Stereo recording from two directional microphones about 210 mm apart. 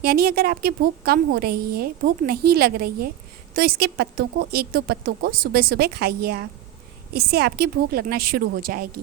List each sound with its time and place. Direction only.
0.0 s a woman's voice: 45° right (ahead or behind)